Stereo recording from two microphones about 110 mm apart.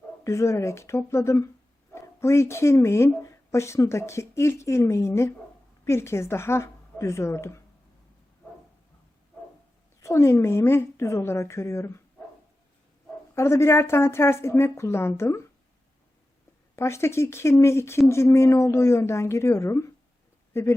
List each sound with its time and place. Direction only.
0.3 s a woman's voice: 25° left (ahead or behind)
10.0 s speech: 25° left (ahead or behind)
13.3 s speech: 25° left (ahead or behind)
16.7 s speech: 25° left (ahead or behind)